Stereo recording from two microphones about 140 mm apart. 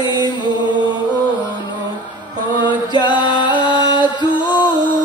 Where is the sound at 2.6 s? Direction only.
35° left (ahead or behind).